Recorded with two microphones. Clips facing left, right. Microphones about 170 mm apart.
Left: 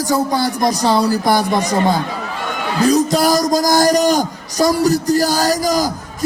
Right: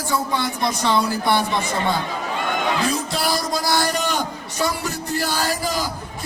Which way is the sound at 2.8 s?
40° left (ahead or behind).